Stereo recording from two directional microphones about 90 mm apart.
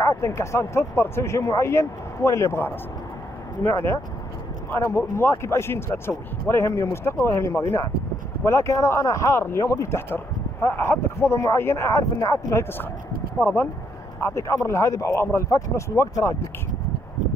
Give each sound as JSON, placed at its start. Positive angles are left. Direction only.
{"t": 0.0, "sound": "speech", "side_deg": 30}
{"t": 14.2, "sound": "speech", "side_deg": 35}